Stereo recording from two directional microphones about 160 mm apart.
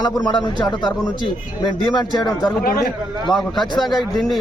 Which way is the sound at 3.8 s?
Centre (ahead or behind).